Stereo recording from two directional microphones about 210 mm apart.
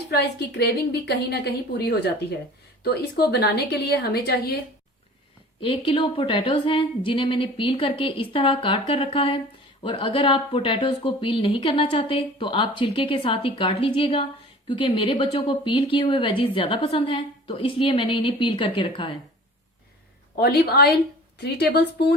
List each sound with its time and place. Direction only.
0.1 s a woman's voice: 50° left (ahead or behind)
5.5 s a woman's voice: 25° left (ahead or behind)
20.4 s a woman's voice: 50° left (ahead or behind)